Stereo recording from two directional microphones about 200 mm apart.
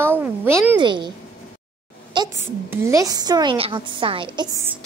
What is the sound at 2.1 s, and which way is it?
A woman's voice, 20° right (ahead or behind).